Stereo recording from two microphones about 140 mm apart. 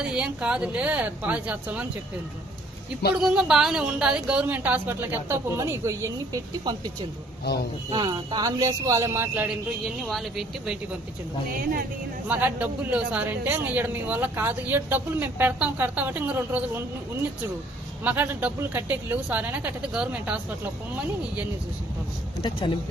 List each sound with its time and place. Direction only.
0.0 s a man's voice: 5° right (ahead or behind)
3.2 s a man's voice: 5° right (ahead or behind); by 6.7 s 25° right (ahead or behind)
7.9 s speech: 30° right (ahead or behind); by 9.6 s 15° right (ahead or behind)
10.0 s speech: centre (ahead or behind)
12.3 s a man's voice: 10° right (ahead or behind)
18.0 s a man's voice: 15° right (ahead or behind)